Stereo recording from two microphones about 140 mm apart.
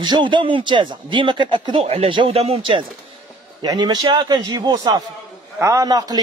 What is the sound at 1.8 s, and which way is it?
Speech, 45° right (ahead or behind).